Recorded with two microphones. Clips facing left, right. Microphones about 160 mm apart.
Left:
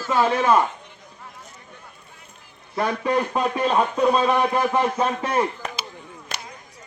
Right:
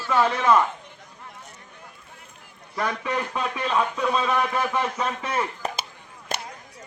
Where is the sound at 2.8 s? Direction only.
35° left (ahead or behind).